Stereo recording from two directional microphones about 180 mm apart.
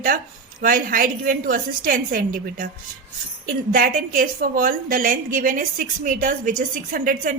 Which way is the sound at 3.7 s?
50° right (ahead or behind).